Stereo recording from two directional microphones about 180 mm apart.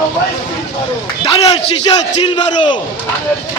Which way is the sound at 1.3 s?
35° left (ahead or behind).